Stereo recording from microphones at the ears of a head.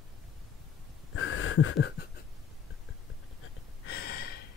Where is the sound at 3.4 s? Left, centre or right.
Left.